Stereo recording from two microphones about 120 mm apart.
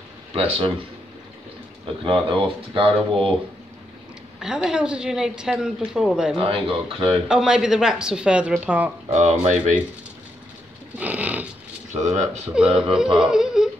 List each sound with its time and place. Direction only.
0.3 s speech: 50° right (ahead or behind)
2.0 s speech: 45° right (ahead or behind)
4.4 s a woman's voice: 5° right (ahead or behind)
6.3 s speech: 50° right (ahead or behind)
7.2 s speech: 5° right (ahead or behind)
9.1 s speech: 70° right (ahead or behind)
11.0 s a sound: 10° right (ahead or behind)
11.9 s speech: 80° right
12.5 s speech: 5° right (ahead or behind)
12.9 s yodeling: 5° right (ahead or behind)